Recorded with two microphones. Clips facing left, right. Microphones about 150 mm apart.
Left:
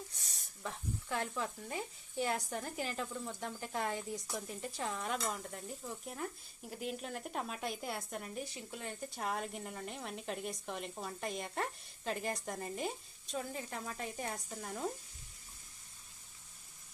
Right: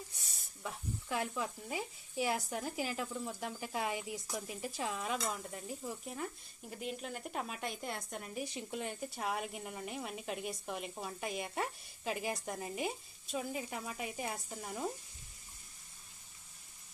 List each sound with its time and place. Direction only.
0.3 s speech: 5° right (ahead or behind)
8.5 s speech: 20° right (ahead or behind)
9.0 s speech: 5° right (ahead or behind)